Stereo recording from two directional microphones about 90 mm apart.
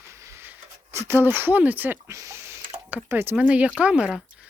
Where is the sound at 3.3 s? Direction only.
15° right (ahead or behind).